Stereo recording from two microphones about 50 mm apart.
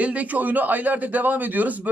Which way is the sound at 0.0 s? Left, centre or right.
Right.